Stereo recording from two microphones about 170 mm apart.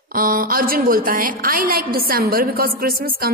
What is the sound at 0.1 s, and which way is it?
A woman's voice, 55° right (ahead or behind).